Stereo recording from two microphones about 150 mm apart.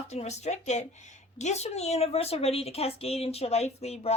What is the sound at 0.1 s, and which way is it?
A woman's voice, 50° left (ahead or behind).